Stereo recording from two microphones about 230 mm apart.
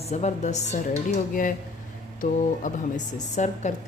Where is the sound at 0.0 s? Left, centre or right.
Left.